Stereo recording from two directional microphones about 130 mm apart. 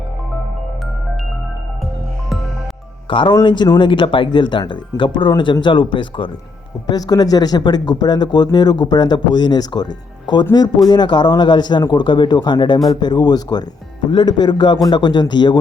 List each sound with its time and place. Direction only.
3.1 s speech: 40° left (ahead or behind)